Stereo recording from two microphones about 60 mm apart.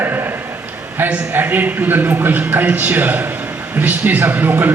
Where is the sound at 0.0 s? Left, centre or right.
Right.